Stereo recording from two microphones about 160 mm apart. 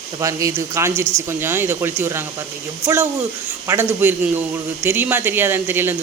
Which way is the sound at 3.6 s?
15° right (ahead or behind).